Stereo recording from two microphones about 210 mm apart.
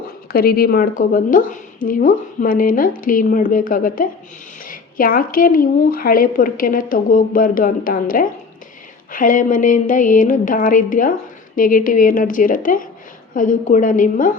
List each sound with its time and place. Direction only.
0.3 s a woman's voice: 45° left (ahead or behind)